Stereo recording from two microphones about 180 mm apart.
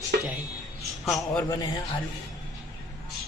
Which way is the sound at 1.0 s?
Centre (ahead or behind).